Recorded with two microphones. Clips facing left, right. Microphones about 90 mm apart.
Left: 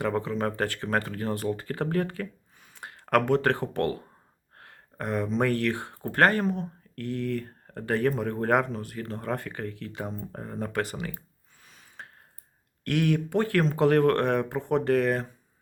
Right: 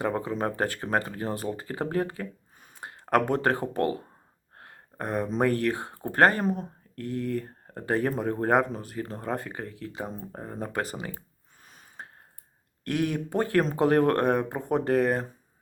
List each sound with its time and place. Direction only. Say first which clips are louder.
0.3 s speech: even; 20° right (ahead or behind)
2.6 s a sound: even; 30° right (ahead or behind)
3.6 s speech: right 1 dB; 20° right (ahead or behind)
4.5 s a sound: right 1 dB; 25° right (ahead or behind)
5.4 s speech: right 2 dB; 30° right (ahead or behind)
7.0 s speech: even; 25° right (ahead or behind)
10.7 s speech: left 1 dB; 25° right (ahead or behind)
11.6 s a sound: right 2 dB; 40° right (ahead or behind)
12.8 s speech: left 2 dB; 25° right (ahead or behind)